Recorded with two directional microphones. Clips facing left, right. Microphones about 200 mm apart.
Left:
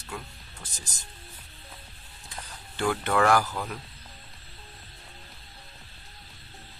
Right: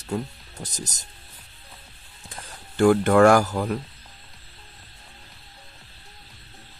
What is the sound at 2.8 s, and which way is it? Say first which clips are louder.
Speech: right 9 dB; 45° right (ahead or behind).